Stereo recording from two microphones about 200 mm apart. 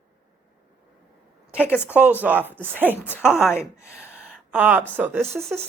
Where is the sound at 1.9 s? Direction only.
10° right (ahead or behind).